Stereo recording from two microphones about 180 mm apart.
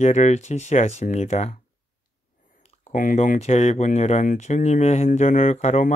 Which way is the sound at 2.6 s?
40° left (ahead or behind).